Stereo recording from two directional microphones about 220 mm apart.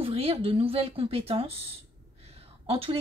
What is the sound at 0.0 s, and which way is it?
A woman's voice, 25° right (ahead or behind).